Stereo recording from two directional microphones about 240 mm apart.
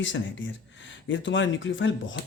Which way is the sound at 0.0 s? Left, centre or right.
Left.